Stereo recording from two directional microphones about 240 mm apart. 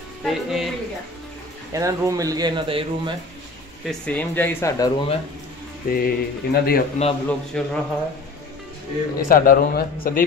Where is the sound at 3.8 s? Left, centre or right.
Centre.